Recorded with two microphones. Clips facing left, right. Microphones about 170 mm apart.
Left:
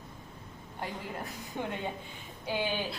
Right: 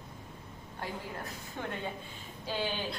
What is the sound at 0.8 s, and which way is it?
A woman's voice, 15° left (ahead or behind).